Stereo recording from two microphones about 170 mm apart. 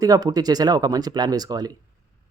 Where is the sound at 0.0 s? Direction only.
20° right (ahead or behind).